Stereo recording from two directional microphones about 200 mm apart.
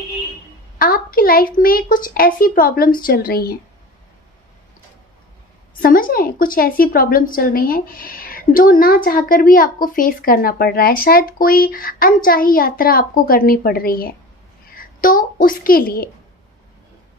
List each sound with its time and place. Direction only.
0.7 s a woman's voice: 45° left (ahead or behind)
5.8 s a woman's voice: 45° left (ahead or behind)